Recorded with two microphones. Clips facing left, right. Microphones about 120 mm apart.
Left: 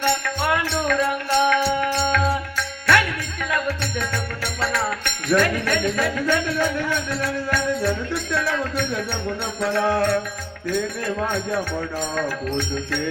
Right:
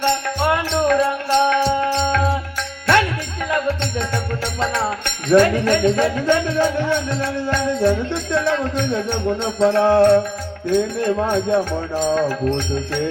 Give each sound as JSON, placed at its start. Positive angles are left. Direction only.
{"t": 0.4, "sound": "music", "side_deg": -20}
{"t": 3.5, "sound": "music", "side_deg": -25}